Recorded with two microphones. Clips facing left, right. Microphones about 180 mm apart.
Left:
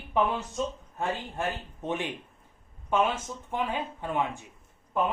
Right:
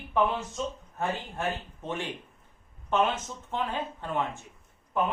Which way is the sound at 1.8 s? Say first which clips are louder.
Left 4 dB; 20° left (ahead or behind).